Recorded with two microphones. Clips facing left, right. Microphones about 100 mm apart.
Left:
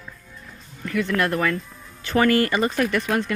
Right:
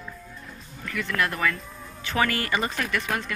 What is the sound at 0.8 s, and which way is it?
Speech, 35° left (ahead or behind).